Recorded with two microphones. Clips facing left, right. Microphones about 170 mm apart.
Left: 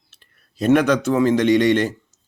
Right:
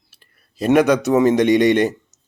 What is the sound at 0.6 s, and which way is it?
Speech, 10° right (ahead or behind).